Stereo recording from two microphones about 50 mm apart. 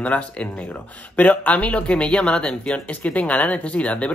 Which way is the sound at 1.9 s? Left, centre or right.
Centre.